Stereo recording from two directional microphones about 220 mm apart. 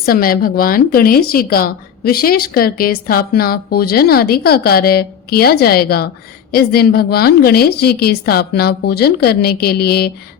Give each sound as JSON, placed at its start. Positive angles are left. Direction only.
{"t": 0.0, "sound": "speech", "side_deg": 40}